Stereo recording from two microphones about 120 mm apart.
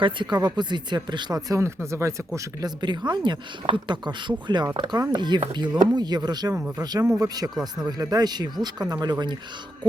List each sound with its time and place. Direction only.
0.0 s speech: 40° right (ahead or behind)